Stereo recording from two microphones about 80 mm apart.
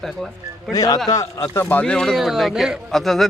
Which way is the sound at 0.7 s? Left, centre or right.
Left.